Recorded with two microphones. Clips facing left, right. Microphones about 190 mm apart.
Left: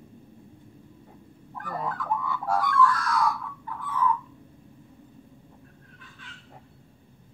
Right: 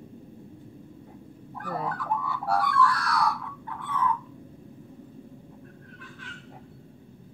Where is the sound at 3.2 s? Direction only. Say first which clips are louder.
Left 1 dB; 70° right (ahead or behind).